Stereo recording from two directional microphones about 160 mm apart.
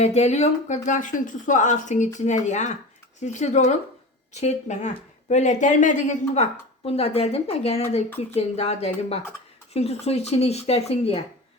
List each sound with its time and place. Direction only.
0.0 s a woman's voice: 45° left (ahead or behind)